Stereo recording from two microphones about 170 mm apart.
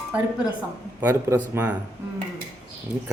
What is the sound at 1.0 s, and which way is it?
Speech, 15° right (ahead or behind).